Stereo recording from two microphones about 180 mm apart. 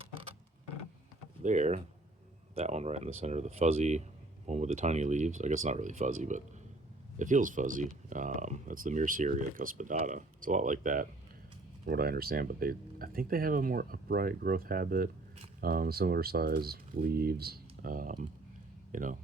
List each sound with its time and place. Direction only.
1.4 s speech: 45° right (ahead or behind)